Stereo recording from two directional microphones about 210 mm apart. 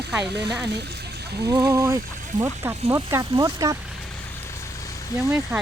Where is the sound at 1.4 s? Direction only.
15° right (ahead or behind).